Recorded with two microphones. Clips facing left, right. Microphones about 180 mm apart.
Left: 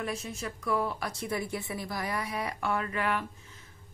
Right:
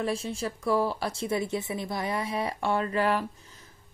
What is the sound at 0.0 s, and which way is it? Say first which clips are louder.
A woman's voice: right 5 dB; 30° right (ahead or behind).